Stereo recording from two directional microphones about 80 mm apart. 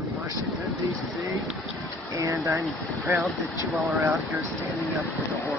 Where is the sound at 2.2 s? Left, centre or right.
Right.